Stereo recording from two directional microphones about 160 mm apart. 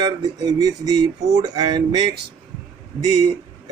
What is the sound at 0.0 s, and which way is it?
Speech, 25° right (ahead or behind).